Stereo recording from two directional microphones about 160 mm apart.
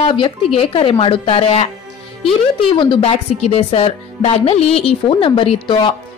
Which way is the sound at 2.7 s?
30° left (ahead or behind).